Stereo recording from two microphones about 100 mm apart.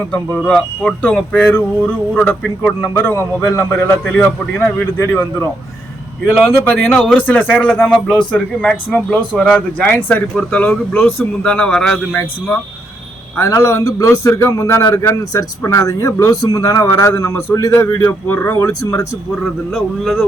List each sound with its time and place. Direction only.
0.1 s a man's voice: 10° left (ahead or behind); by 5.5 s 25° left (ahead or behind)
6.7 s speech: 15° left (ahead or behind)
13.3 s a man's voice: 30° left (ahead or behind)
17.7 s a man's voice: 20° left (ahead or behind)
19.7 s speech: centre (ahead or behind)